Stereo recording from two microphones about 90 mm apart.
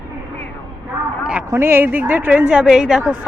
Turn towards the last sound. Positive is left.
turn(degrees=-5)  # may be behind; listen again after turning